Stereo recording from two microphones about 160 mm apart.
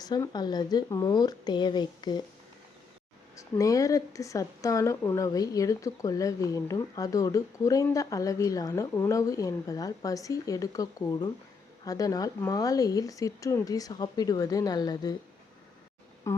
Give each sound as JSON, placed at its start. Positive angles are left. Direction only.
{"t": 0.0, "sound": "speech", "side_deg": 25}
{"t": 3.3, "sound": "speech", "side_deg": 20}
{"t": 16.3, "sound": "speech", "side_deg": 15}